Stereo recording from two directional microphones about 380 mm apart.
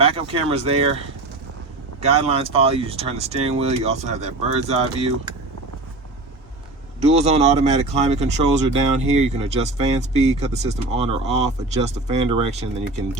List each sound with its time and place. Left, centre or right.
0.0 s speech: centre
2.0 s speech: centre
7.0 s speech: centre